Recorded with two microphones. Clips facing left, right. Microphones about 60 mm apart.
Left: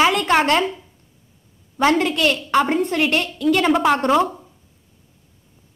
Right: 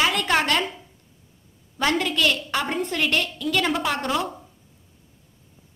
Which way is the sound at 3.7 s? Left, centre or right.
Left.